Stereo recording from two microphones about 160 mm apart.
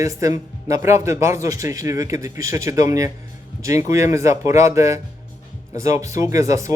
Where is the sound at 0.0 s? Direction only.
20° right (ahead or behind).